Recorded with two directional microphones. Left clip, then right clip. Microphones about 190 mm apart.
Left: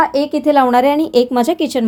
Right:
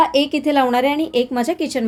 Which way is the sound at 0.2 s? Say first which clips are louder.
Left 4 dB; 15° left (ahead or behind).